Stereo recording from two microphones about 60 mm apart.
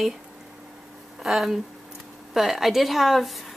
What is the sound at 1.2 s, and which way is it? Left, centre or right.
A woman's voice, centre.